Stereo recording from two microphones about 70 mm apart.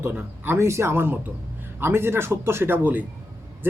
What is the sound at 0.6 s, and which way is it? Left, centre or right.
Speech, right.